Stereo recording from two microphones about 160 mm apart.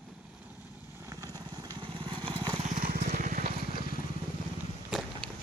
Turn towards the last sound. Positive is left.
turn(degrees=-5)  # may be behind; listen again after turning